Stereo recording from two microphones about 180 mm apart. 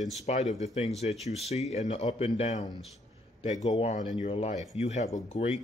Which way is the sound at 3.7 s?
40° left (ahead or behind).